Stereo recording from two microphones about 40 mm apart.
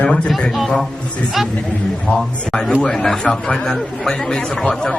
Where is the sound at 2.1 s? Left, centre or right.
Left.